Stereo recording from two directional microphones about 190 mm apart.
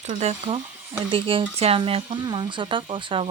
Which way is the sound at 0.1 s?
35° right (ahead or behind).